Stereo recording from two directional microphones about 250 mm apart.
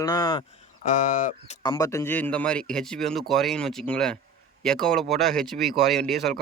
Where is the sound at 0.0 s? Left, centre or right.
Centre.